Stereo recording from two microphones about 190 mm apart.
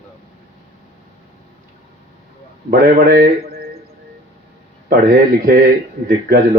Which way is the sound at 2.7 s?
50° right (ahead or behind).